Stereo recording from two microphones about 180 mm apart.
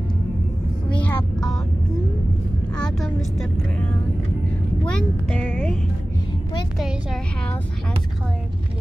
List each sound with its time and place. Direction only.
1.0 s vehicle: 5° left (ahead or behind)
2.8 s speech: centre (ahead or behind)
4.8 s speech: 5° left (ahead or behind)
6.8 s speech: centre (ahead or behind)